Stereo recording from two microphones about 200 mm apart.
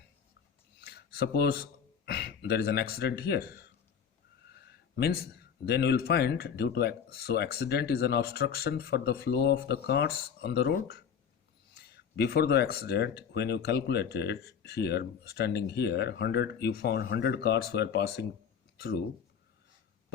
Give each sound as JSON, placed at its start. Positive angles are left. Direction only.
{"t": 0.8, "sound": "a sound", "side_deg": 50}
{"t": 2.0, "sound": "speech", "side_deg": 55}
{"t": 4.7, "sound": "speech", "side_deg": 50}